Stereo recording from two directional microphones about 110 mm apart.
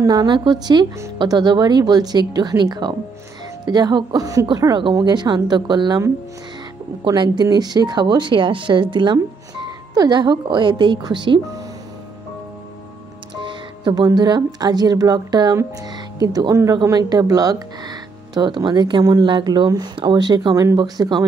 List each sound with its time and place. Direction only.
0.0 s speech: 40° right (ahead or behind)
7.1 s speech: 35° right (ahead or behind)
13.3 s music: 50° right (ahead or behind)
14.0 s speech: 40° right (ahead or behind)